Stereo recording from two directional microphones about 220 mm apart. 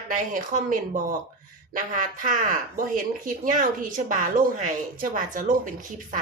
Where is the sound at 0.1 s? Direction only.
35° right (ahead or behind).